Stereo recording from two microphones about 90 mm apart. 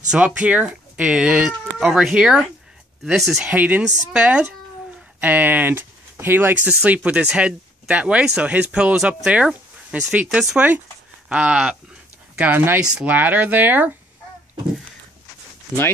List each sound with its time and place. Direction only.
0.1 s speech: 15° right (ahead or behind)
3.4 s speech: 15° right (ahead or behind)